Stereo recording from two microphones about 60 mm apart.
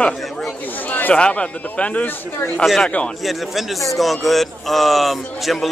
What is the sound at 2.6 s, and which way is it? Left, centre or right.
Speech, centre.